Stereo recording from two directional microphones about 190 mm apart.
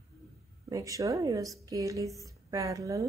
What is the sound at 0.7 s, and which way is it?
A woman's voice, 15° right (ahead or behind).